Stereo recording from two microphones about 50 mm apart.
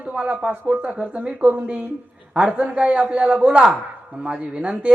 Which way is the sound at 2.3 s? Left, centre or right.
Right.